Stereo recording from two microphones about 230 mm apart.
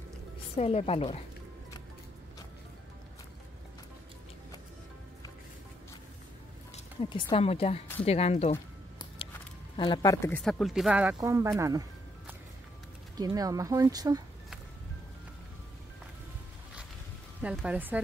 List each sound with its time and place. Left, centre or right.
0.6 s a woman's voice: left
7.0 s a woman's voice: left
8.0 s a sound: left
9.8 s speech: centre
13.1 s speech: centre
17.4 s speech: centre